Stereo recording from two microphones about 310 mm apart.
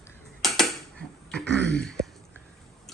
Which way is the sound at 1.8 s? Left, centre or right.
Centre.